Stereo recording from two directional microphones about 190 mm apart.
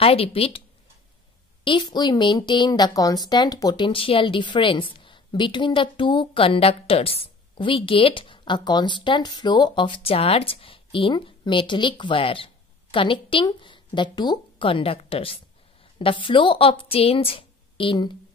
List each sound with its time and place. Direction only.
0.0 s a woman's voice: 30° left (ahead or behind)
1.6 s a woman's voice: 25° left (ahead or behind)